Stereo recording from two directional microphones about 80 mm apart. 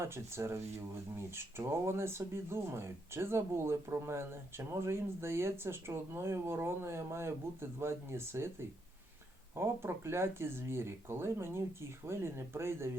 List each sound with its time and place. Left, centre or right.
0.0 s speech: right